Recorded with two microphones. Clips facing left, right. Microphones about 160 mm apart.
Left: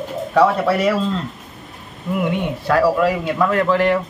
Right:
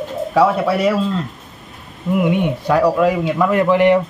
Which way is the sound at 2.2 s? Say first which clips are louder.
Right 3 dB; 15° right (ahead or behind).